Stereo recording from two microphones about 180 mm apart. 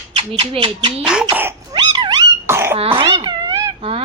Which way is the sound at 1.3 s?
10° right (ahead or behind).